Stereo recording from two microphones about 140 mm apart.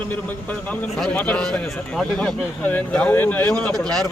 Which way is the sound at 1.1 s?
10° left (ahead or behind).